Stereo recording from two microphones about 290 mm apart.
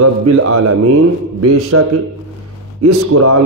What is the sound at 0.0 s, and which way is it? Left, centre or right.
A man's voice, right.